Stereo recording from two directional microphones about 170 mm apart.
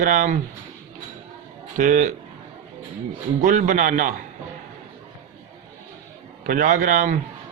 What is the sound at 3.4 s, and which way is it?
Speech, 50° right (ahead or behind).